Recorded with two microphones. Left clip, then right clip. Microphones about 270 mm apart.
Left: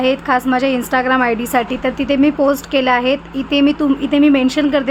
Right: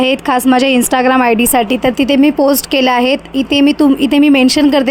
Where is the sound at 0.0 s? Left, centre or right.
Right.